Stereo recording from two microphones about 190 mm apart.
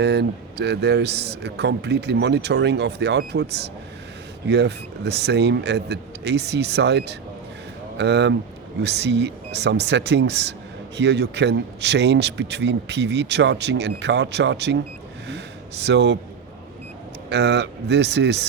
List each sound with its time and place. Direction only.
0.0 s speech: 60° right (ahead or behind)
17.2 s speech: 65° right (ahead or behind)